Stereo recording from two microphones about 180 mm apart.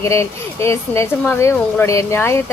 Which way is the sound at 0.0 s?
15° left (ahead or behind).